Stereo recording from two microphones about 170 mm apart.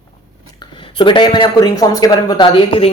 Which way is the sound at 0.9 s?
30° left (ahead or behind).